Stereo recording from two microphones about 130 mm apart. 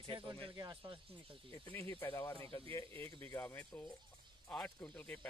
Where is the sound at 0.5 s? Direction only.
30° right (ahead or behind).